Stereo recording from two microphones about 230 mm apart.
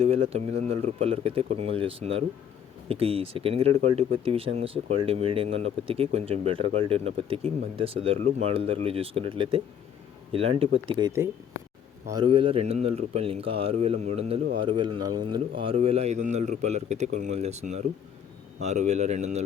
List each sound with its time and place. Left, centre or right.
0.0 s speech: right
10.8 s speech: centre